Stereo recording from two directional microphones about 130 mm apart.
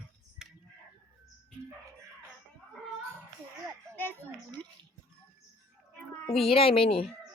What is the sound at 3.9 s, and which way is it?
Children playing, 15° left (ahead or behind).